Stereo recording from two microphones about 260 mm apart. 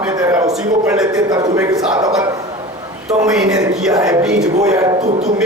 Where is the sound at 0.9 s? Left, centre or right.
Centre.